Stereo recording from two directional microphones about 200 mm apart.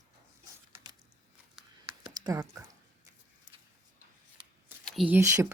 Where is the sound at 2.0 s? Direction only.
20° right (ahead or behind).